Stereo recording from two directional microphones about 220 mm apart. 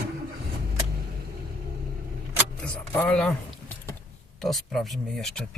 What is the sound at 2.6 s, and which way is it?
Speech, 5° left (ahead or behind).